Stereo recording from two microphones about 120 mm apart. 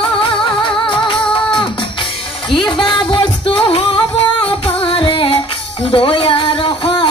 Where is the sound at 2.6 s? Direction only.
40° left (ahead or behind).